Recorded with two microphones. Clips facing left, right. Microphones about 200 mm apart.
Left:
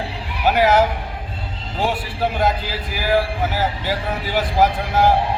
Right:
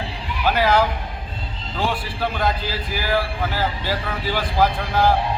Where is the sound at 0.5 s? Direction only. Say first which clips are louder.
Left 3 dB; 20° left (ahead or behind).